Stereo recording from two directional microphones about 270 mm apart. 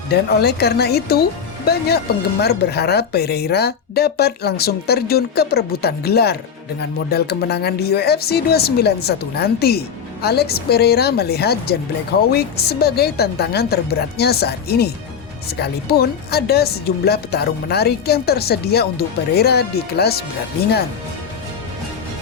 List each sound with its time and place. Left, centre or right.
0.1 s speech: left
2.4 s speech: left